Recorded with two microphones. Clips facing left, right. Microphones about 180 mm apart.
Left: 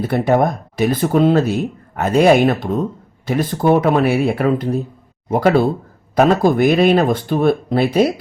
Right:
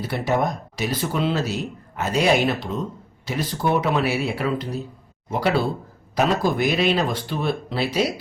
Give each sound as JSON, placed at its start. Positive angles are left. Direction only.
{"t": 0.0, "sound": "speech", "side_deg": 55}